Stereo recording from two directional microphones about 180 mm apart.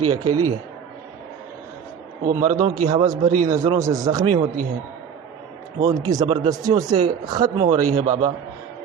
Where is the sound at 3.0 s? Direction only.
20° right (ahead or behind).